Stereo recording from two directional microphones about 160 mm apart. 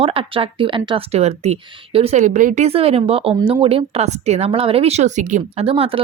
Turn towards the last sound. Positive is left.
turn(degrees=-35)  # may be behind; listen again after turning